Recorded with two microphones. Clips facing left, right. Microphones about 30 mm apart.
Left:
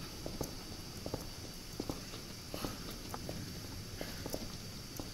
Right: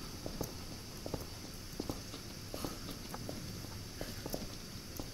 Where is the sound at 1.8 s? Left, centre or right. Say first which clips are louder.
Even; centre.